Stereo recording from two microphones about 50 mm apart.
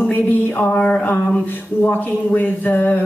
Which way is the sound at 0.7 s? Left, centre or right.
Left.